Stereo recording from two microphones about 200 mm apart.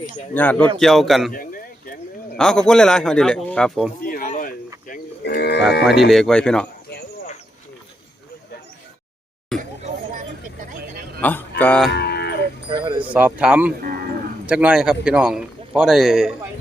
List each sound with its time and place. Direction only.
0.3 s a man's voice: 10° left (ahead or behind)
2.3 s a man's voice: 5° left (ahead or behind)
4.0 s a sound: 45° left (ahead or behind)
4.9 s livestock: 55° left (ahead or behind)
5.8 s a man's voice: centre (ahead or behind)
11.2 s a man's voice: 10° left (ahead or behind)
11.9 s dog: 55° left (ahead or behind)
12.6 s a sound: 20° right (ahead or behind)
13.0 s a man's voice: 10° right (ahead or behind)